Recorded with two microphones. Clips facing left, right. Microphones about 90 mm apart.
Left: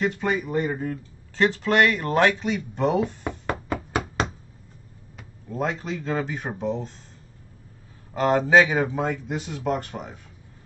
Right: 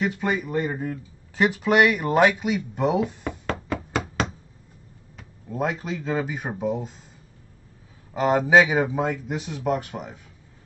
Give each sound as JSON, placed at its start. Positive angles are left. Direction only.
{"t": 0.0, "sound": "speech", "side_deg": -5}
{"t": 3.3, "sound": "knock", "side_deg": 15}
{"t": 5.1, "sound": "speech", "side_deg": -5}
{"t": 8.1, "sound": "speech", "side_deg": -5}